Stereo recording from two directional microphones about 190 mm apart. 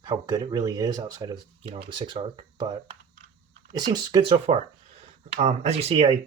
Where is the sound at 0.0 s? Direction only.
20° right (ahead or behind).